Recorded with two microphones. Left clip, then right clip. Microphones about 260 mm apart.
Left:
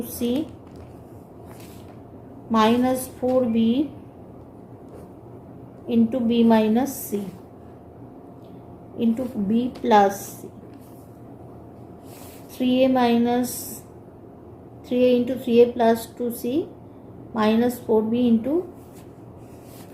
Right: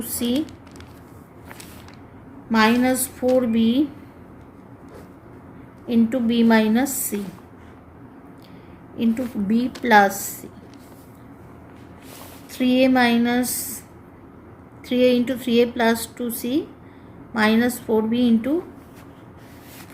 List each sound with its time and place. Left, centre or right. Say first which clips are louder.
2.5 s a woman's voice: right 1 dB; right
5.9 s a woman's voice: right 1 dB; right
9.0 s a woman's voice: right 1 dB; right
12.5 s a woman's voice: right 2 dB; right
14.8 s a woman's voice: right 1 dB; right